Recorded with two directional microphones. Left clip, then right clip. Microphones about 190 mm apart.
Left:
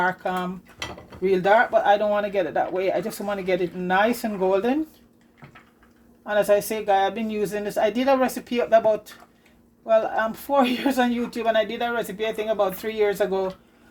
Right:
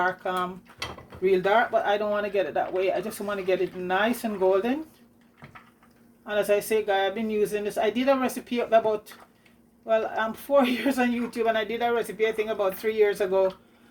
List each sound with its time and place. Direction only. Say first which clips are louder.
0.2 s speech: left 1 dB; 45° left (ahead or behind)
6.2 s speech: left 4 dB; 40° left (ahead or behind)